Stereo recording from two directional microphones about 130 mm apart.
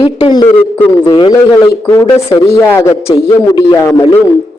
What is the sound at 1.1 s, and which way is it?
Speech, 40° left (ahead or behind).